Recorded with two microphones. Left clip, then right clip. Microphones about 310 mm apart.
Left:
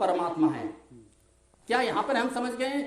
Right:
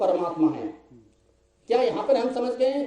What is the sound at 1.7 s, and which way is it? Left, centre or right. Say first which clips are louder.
Speech: right 5 dB; left.